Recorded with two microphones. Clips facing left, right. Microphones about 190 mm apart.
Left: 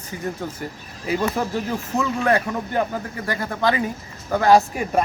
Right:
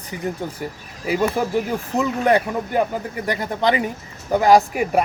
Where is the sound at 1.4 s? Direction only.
10° right (ahead or behind).